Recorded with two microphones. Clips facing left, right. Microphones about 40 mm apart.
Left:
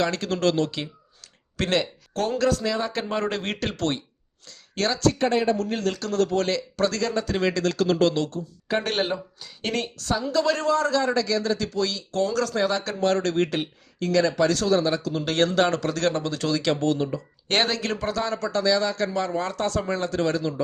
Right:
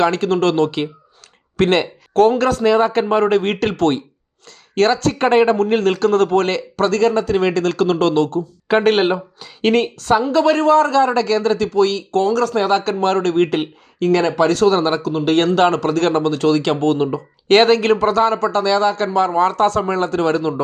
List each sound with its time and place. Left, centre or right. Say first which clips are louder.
0.0 s speech: right 8 dB; right
8.6 s speech: right 11 dB; right